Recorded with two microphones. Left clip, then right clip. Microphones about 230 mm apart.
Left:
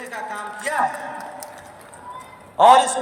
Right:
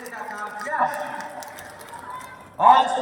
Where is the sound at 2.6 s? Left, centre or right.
Left.